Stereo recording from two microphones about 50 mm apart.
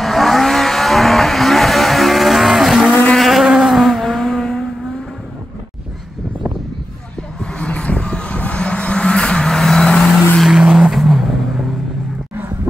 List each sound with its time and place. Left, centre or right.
0.0 s vehicle: centre
7.5 s vehicle: left
10.6 s vehicle: centre
10.9 s vehicle: centre